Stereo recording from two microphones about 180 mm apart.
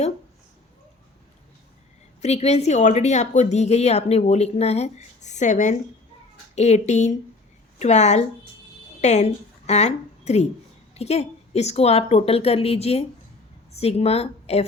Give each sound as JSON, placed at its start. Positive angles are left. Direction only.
{"t": 2.2, "sound": "a woman's voice", "side_deg": 35}